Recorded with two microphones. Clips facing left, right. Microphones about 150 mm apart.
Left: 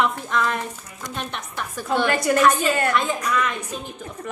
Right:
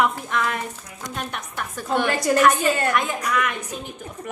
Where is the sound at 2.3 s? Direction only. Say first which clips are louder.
Right 1 dB; 30° right (ahead or behind).